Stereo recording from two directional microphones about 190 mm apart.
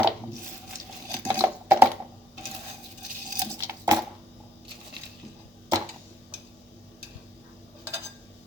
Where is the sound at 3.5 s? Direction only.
15° right (ahead or behind).